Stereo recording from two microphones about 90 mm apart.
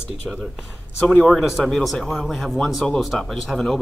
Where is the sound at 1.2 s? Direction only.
5° left (ahead or behind).